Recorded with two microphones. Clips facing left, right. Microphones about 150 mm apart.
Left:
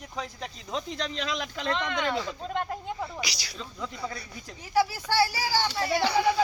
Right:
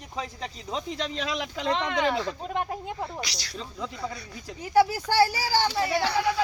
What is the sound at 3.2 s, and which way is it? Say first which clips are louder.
Speech: even; 5° left (ahead or behind).